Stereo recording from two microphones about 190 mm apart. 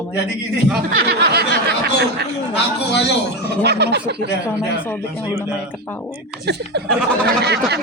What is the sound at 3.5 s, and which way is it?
Speech, 60° right (ahead or behind).